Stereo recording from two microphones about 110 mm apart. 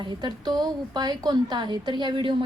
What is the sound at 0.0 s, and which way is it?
A woman's voice, 40° right (ahead or behind).